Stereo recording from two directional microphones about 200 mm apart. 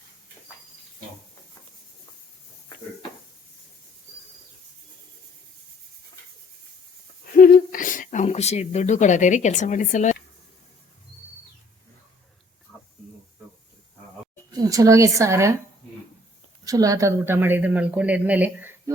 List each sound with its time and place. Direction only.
7.3 s speech: 45° left (ahead or behind)
14.6 s speech: 15° right (ahead or behind)
16.6 s speech: 15° right (ahead or behind)